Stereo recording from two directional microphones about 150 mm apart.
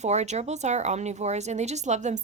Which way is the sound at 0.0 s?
50° right (ahead or behind).